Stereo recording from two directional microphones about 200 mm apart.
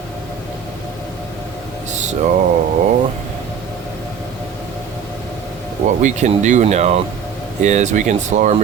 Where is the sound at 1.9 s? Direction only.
35° right (ahead or behind).